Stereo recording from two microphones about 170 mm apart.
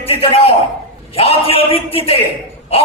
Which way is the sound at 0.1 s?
35° left (ahead or behind).